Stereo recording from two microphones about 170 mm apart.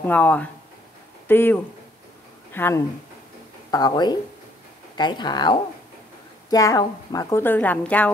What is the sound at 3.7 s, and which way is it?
A woman's voice, 25° left (ahead or behind).